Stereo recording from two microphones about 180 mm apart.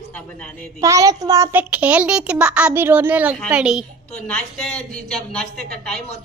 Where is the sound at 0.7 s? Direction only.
15° right (ahead or behind).